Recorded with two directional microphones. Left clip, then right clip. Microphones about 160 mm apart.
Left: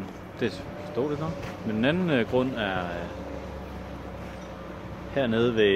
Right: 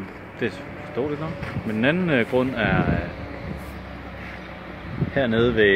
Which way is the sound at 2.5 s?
25° right (ahead or behind).